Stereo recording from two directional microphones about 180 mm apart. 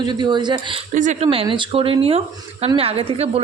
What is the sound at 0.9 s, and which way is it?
A woman's voice, 45° right (ahead or behind).